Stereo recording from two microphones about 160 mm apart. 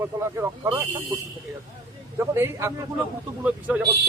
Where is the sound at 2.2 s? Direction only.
15° right (ahead or behind).